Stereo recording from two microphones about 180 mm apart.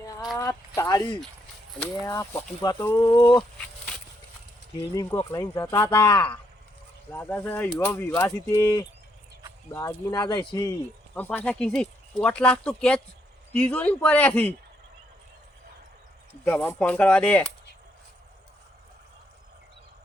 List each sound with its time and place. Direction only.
0.3 s speech: 15° left (ahead or behind)
4.9 s speech: 20° left (ahead or behind)
11.1 s speech: 10° left (ahead or behind)
16.4 s speech: 10° left (ahead or behind)